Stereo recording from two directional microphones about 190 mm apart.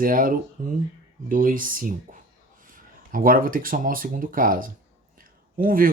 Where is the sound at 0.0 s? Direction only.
45° right (ahead or behind).